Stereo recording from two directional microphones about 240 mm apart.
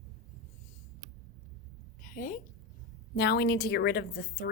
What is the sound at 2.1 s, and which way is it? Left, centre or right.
A woman's voice, left.